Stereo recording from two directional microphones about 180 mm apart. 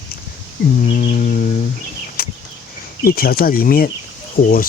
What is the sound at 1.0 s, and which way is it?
Speech, 45° left (ahead or behind).